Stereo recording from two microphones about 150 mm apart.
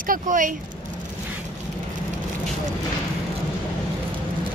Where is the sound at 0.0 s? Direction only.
65° right (ahead or behind).